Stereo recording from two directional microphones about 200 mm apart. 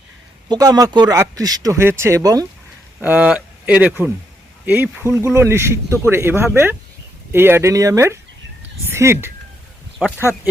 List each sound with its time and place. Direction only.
0.4 s speech: 20° right (ahead or behind)
3.0 s speech: 5° right (ahead or behind)